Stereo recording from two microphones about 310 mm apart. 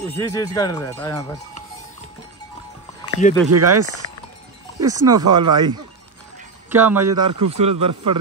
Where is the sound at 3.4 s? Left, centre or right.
Right.